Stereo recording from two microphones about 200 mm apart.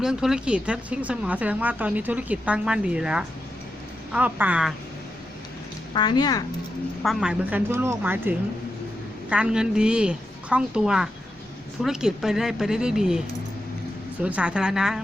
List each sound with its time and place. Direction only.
0.0 s speech: 5° right (ahead or behind)
5.9 s speech: 20° left (ahead or behind)
7.0 s speech: centre (ahead or behind)